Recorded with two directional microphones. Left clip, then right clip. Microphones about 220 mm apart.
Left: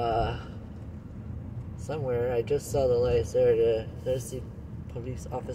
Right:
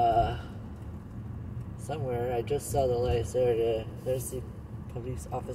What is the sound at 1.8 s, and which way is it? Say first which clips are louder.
Speech: left 3 dB; 20° left (ahead or behind).